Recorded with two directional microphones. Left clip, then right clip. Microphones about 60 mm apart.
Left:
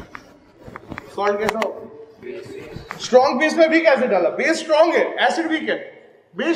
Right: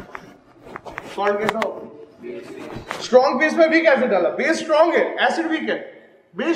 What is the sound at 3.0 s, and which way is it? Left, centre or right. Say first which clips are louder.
A man's voice: even; left.